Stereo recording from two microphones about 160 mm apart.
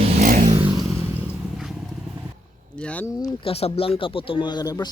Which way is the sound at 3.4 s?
35° left (ahead or behind).